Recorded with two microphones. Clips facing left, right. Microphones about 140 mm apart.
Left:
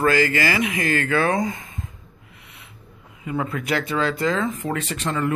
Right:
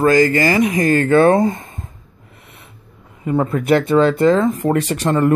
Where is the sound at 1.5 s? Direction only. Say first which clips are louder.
Right 4 dB; 45° right (ahead or behind).